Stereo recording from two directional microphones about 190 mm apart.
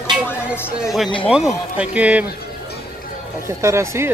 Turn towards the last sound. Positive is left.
turn(degrees=-15)  # may be behind; listen again after turning